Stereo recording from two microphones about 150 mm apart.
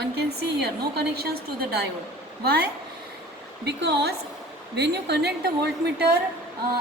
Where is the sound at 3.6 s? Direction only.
90° right.